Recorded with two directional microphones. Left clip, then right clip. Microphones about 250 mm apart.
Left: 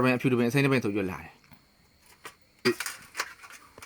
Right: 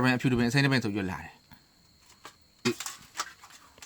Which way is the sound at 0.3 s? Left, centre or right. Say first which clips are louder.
Left 2 dB; right.